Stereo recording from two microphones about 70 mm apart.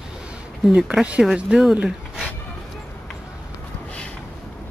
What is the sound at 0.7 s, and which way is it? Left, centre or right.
Speech, centre.